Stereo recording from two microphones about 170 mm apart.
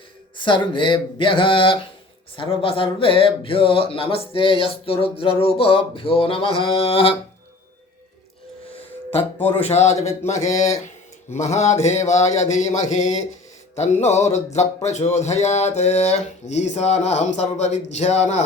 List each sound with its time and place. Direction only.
0.3 s a sound: 30° left (ahead or behind)
2.3 s speech: 30° left (ahead or behind)
9.6 s speech: 40° left (ahead or behind)
13.9 s music: 15° left (ahead or behind)
14.3 s speech: 40° left (ahead or behind)